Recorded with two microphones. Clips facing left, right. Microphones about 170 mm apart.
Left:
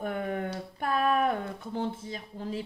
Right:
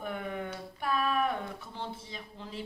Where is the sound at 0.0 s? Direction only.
45° left (ahead or behind).